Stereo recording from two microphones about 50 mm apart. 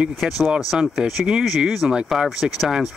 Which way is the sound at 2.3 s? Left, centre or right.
Centre.